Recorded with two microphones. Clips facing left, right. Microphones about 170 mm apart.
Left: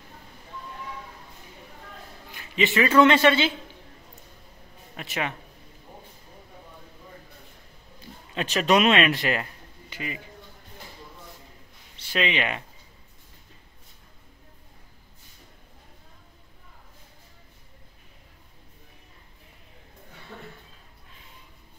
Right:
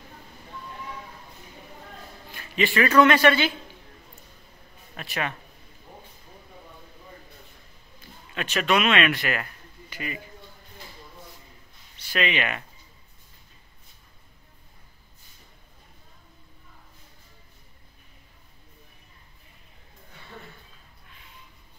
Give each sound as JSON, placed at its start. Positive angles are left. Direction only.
{"t": 2.3, "sound": "a sound", "side_deg": 20}
{"t": 3.0, "sound": "a man's voice", "side_deg": 25}
{"t": 4.9, "sound": "speech", "side_deg": 20}
{"t": 8.6, "sound": "a man's voice", "side_deg": 35}
{"t": 12.0, "sound": "speech", "side_deg": 25}